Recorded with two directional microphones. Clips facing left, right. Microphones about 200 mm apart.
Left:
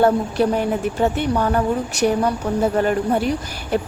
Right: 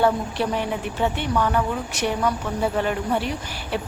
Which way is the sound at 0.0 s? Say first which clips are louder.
Left 5 dB; 45° left (ahead or behind).